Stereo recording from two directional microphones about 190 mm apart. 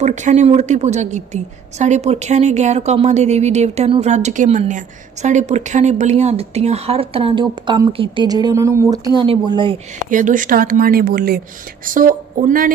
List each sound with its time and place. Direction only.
0.0 s speech: 40° right (ahead or behind)
10.1 s speech: 45° right (ahead or behind)